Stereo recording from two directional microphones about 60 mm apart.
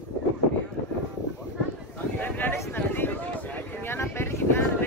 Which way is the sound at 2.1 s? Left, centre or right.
Left.